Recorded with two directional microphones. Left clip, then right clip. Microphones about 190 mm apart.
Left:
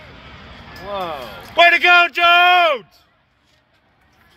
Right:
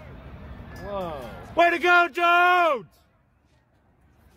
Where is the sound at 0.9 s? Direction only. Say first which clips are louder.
Left 7 dB; 25° left (ahead or behind).